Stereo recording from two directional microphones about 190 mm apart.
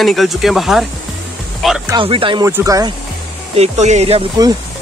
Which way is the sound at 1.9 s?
25° right (ahead or behind).